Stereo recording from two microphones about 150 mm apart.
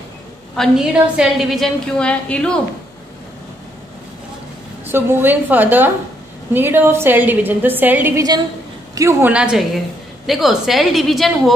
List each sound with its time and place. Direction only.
0.6 s a woman's voice: 5° right (ahead or behind)
4.9 s a woman's voice: 10° right (ahead or behind)
8.2 s a woman's voice: 25° right (ahead or behind)
9.3 s a woman's voice: 5° right (ahead or behind)